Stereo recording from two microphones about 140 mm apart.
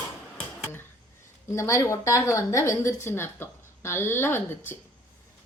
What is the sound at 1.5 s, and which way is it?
A woman's voice, 20° left (ahead or behind).